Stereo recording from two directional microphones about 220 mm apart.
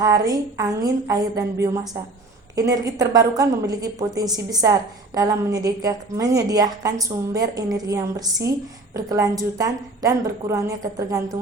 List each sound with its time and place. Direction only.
0.0 s a woman's voice: 15° right (ahead or behind)